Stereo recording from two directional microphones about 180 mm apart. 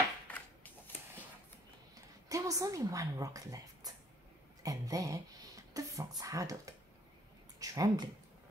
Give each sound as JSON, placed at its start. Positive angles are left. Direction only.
{"t": 0.3, "sound": "shuffling cards", "side_deg": 10}
{"t": 2.2, "sound": "speech", "side_deg": -20}